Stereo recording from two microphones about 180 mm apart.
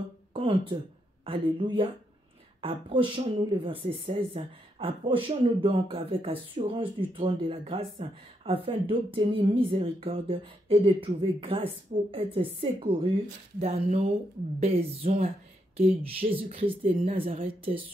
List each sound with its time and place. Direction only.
0.3 s speech: 30° right (ahead or behind)